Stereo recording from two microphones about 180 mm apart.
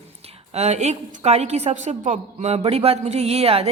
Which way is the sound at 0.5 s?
40° right (ahead or behind).